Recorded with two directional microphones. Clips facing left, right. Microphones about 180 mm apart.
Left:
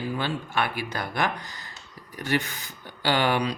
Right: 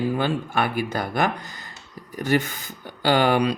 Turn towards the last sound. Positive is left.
turn(degrees=-45)  # may be behind; listen again after turning